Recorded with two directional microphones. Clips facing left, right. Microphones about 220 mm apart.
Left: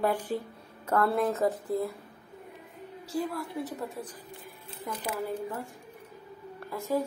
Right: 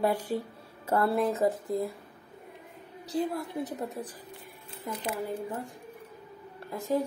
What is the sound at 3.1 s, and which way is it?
Speech, 20° right (ahead or behind).